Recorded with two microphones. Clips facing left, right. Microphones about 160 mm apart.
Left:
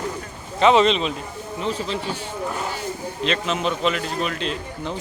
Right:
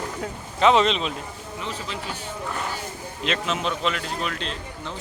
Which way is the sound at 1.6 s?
35° left (ahead or behind).